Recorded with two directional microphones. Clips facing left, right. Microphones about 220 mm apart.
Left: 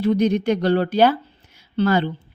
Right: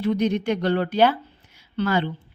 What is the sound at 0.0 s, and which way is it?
A woman's voice, 35° left (ahead or behind).